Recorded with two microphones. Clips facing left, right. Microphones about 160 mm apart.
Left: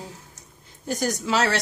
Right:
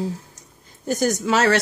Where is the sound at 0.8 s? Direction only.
50° right (ahead or behind).